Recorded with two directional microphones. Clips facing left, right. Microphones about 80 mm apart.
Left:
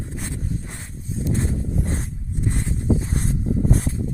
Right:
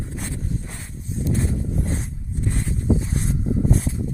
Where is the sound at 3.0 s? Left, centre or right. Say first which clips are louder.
Even; left.